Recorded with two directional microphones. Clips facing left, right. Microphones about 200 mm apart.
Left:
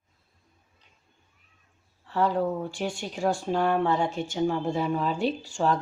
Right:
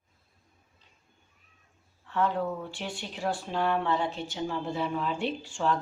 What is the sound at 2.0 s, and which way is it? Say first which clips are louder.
Speech: left 3 dB; 35° left (ahead or behind).